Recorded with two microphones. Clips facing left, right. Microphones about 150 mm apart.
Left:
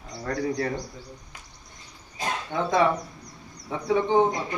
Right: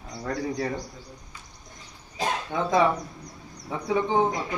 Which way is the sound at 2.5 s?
5° right (ahead or behind).